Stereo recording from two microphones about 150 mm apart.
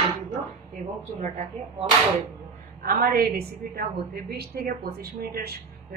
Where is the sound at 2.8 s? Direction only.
75° right (ahead or behind); by 5.5 s 90° right.